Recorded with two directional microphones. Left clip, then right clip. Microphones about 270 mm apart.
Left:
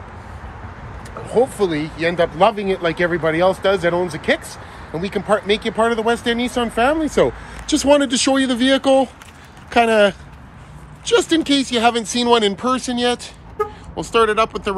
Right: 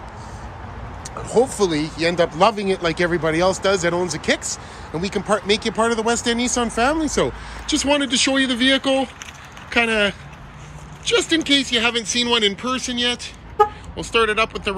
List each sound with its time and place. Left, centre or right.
1.3 s speech: centre